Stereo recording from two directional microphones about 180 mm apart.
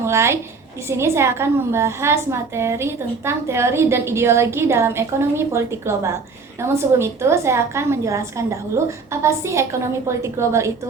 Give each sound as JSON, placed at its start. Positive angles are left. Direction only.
{"t": 0.0, "sound": "a woman's voice", "side_deg": -15}